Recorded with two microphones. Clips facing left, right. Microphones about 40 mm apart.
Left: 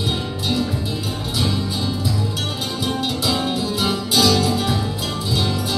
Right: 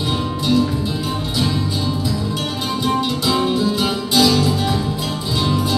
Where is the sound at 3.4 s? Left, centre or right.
Centre.